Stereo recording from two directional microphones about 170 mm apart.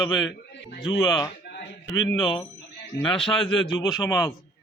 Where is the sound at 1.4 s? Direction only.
80° left.